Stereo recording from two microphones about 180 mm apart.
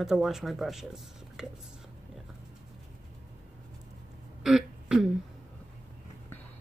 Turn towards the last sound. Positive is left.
turn(degrees=-5)  # may be behind; listen again after turning